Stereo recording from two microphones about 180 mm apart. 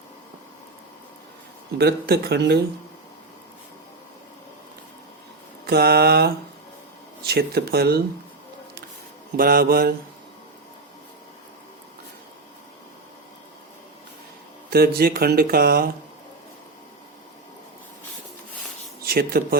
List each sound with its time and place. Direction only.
1.8 s speech: 65° right (ahead or behind)
5.6 s speech: 60° right (ahead or behind)
9.4 s speech: 55° right (ahead or behind)
14.7 s speech: 60° right (ahead or behind)
19.0 s speech: 60° right (ahead or behind)